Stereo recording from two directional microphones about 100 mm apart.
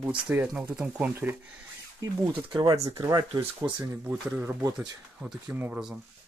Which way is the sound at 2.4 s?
55° right (ahead or behind).